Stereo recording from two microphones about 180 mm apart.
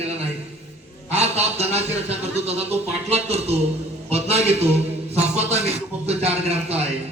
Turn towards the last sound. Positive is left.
turn(degrees=-35)  # may be behind; listen again after turning